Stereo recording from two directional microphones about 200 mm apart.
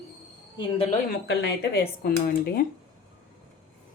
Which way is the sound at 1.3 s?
55° left (ahead or behind).